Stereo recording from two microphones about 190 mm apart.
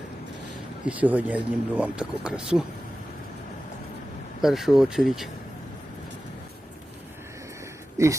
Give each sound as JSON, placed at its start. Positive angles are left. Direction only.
{"t": 0.9, "sound": "speech", "side_deg": -10}
{"t": 4.4, "sound": "speech", "side_deg": 0}
{"t": 7.9, "sound": "speech", "side_deg": -15}